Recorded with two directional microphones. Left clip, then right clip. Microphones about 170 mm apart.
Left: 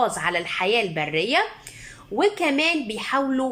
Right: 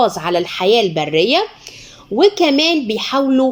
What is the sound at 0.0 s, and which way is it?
A woman's voice, 25° right (ahead or behind).